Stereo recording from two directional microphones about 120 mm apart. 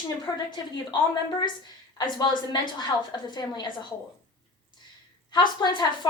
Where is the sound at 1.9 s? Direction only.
40° left (ahead or behind).